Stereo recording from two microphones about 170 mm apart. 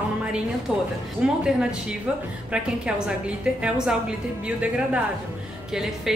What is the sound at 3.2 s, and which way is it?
A woman's voice, 5° right (ahead or behind).